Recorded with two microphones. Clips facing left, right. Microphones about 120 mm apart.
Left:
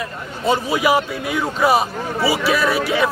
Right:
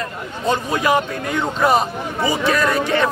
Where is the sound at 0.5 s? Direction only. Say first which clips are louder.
Left 1 dB; 10° left (ahead or behind).